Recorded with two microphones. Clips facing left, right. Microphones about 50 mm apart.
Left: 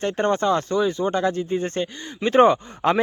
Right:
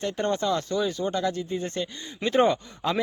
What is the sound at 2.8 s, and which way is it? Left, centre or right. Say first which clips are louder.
Speech: left 7 dB; left.